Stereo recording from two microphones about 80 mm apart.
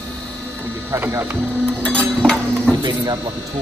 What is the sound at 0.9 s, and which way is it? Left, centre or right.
Speech, right.